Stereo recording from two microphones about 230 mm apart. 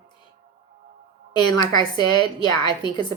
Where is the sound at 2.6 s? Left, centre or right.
Centre.